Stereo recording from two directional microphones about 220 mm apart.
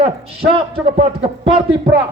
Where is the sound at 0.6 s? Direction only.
25° right (ahead or behind).